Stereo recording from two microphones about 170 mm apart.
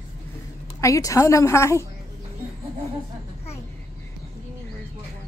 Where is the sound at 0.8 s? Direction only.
20° left (ahead or behind).